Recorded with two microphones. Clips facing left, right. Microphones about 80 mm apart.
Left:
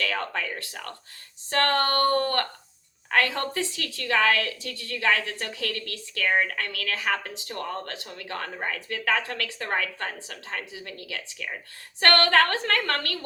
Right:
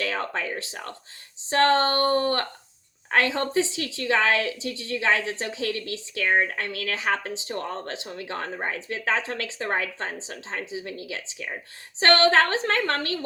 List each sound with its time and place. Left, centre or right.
0.0 s speech: right
6.4 s speech: right